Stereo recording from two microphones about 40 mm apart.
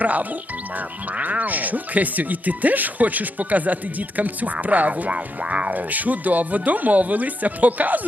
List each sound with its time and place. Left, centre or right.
0.0 s speech: right
5.7 s speech: right